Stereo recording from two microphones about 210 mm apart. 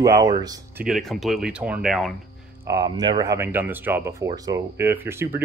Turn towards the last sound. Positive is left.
turn(degrees=-10)  # may be behind; listen again after turning